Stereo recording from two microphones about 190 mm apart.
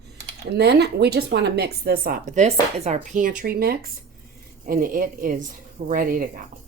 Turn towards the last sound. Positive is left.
turn(degrees=-45)  # may be behind; listen again after turning